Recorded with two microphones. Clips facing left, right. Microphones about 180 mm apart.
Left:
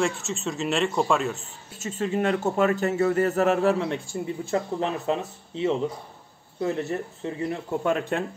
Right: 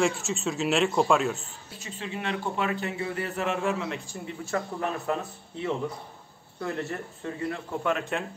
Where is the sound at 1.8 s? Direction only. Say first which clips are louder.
Left 10 dB; 45° left (ahead or behind).